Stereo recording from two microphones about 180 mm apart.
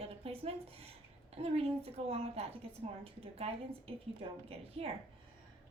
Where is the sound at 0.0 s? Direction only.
35° right (ahead or behind).